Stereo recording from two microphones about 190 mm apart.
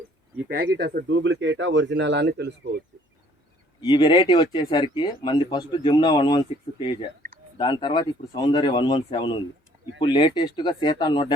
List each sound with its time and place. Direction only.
0.4 s speech: 55° right (ahead or behind)
3.8 s speech: 25° left (ahead or behind)